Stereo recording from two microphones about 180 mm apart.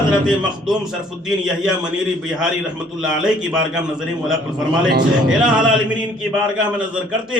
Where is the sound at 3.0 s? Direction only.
5° right (ahead or behind).